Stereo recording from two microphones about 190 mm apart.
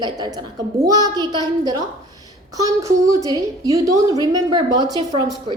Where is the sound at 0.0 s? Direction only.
20° right (ahead or behind).